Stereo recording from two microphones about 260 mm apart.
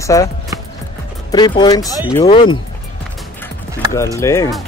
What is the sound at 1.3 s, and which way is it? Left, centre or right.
Speech, centre.